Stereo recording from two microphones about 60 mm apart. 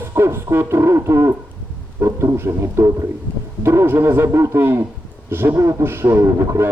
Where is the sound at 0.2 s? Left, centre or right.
Right.